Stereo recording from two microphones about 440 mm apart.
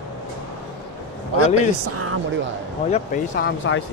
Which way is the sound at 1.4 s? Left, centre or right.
Right.